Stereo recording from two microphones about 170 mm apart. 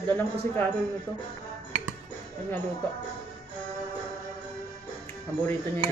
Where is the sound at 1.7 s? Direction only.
45° right (ahead or behind).